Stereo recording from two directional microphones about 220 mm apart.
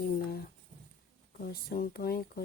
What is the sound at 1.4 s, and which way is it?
Speech, 40° left (ahead or behind).